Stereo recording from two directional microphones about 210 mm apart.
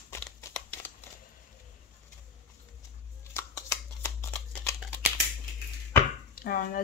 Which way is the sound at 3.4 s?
15° left (ahead or behind).